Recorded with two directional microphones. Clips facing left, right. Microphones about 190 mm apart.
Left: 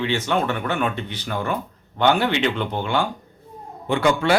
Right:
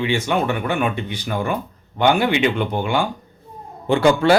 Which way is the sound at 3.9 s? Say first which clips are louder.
Right 4 dB; 30° right (ahead or behind).